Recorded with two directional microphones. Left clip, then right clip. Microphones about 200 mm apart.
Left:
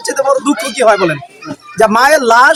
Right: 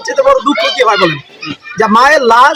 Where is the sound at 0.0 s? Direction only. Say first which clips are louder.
Right 3 dB; 20° left (ahead or behind).